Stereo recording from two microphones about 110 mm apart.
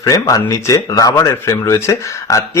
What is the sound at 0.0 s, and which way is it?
Speech, 35° left (ahead or behind).